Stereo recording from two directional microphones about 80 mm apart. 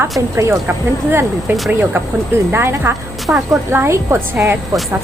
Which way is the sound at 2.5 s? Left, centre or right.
Right.